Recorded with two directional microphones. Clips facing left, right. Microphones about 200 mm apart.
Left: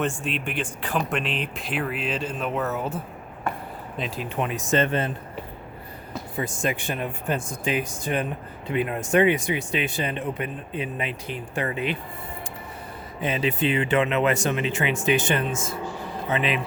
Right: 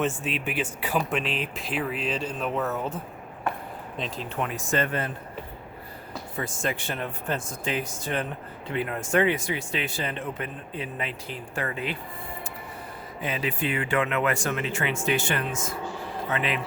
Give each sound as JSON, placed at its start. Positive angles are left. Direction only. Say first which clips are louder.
{"t": 0.0, "sound": "speech", "louder": "left 1 dB", "side_deg": 0}
{"t": 4.4, "sound": "speech", "louder": "left 4 dB", "side_deg": 20}
{"t": 6.3, "sound": "speech", "louder": "left 3 dB", "side_deg": 15}
{"t": 13.2, "sound": "speech", "louder": "left 5 dB", "side_deg": 25}